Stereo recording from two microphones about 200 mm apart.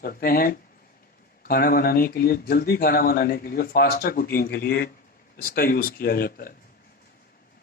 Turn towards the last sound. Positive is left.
turn(degrees=45)  # may be behind; listen again after turning